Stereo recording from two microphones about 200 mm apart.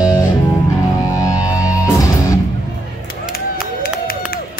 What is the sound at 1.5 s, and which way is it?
Music, 15° left (ahead or behind).